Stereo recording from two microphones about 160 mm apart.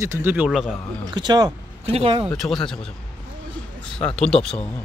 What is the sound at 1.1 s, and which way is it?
Speech, 25° right (ahead or behind).